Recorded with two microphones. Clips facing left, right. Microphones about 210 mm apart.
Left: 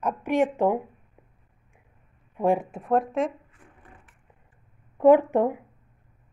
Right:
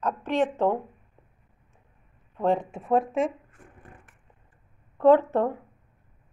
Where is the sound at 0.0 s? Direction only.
10° left (ahead or behind).